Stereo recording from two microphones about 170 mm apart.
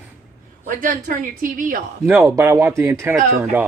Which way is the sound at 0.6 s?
50° right (ahead or behind).